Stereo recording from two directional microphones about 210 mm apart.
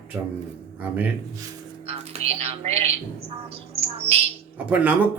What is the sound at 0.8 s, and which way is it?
Speech, 5° right (ahead or behind).